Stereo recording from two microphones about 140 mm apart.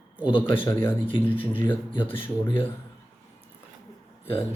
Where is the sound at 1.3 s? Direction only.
40° left (ahead or behind).